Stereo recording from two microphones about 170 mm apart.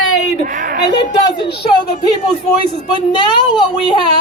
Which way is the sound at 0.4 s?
55° right (ahead or behind).